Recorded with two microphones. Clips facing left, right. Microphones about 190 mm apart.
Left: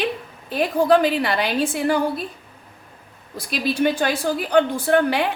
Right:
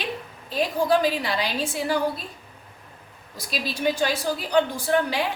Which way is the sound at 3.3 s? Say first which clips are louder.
Left 8 dB; 55° left (ahead or behind).